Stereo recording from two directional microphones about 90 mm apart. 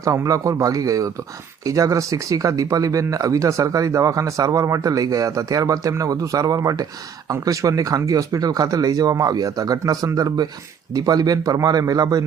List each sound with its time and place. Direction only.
0.0 s speech: 35° right (ahead or behind)